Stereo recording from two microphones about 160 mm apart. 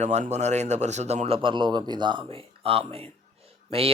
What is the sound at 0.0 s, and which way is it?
Speech, 45° right (ahead or behind).